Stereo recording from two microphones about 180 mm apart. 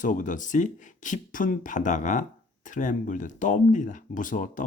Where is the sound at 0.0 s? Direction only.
45° left (ahead or behind).